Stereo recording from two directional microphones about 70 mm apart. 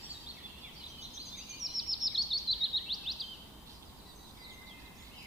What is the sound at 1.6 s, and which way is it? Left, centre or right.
Bird vocalization, centre.